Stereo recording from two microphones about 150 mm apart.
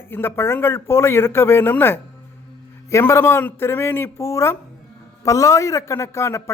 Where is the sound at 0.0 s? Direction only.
15° left (ahead or behind).